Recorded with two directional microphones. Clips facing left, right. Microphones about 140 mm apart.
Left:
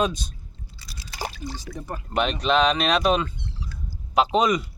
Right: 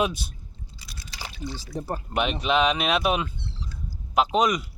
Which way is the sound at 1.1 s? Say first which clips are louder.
Left 3 dB; 45° left (ahead or behind).